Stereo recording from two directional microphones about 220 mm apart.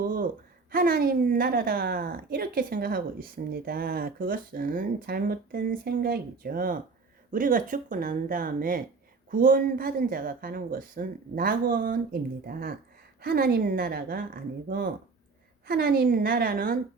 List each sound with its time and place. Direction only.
0.7 s a woman's voice: 40° right (ahead or behind)
15.6 s a woman's voice: 45° right (ahead or behind)